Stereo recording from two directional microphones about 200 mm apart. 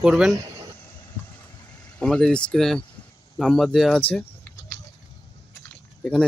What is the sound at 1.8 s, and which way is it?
Speech, 5° left (ahead or behind).